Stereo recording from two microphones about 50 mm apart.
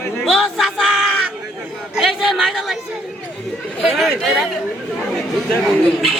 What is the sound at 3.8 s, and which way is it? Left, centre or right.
Speech, centre.